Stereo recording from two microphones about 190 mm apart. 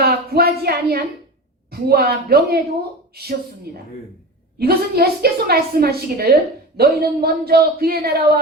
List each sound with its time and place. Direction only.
0.0 s a woman's voice: 55° right (ahead or behind)